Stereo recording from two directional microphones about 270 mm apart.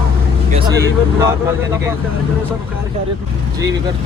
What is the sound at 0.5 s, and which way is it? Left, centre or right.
Speech, centre.